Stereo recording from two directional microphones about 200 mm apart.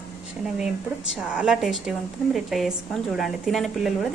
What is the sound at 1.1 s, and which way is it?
A woman's voice, 5° right (ahead or behind).